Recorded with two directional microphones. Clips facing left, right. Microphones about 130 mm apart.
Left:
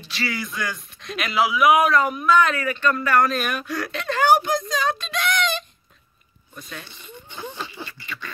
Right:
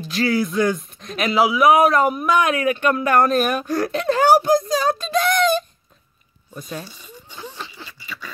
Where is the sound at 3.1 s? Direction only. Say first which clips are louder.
Right 4 dB; 45° right (ahead or behind).